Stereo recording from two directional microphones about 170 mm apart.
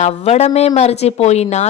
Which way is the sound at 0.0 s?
40° left (ahead or behind).